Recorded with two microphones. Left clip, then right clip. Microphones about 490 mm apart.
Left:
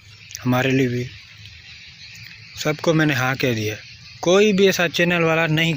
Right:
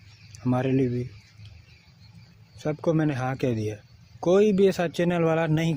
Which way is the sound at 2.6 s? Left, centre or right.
Right.